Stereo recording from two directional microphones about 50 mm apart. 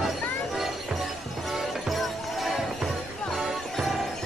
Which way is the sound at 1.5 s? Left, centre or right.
Centre.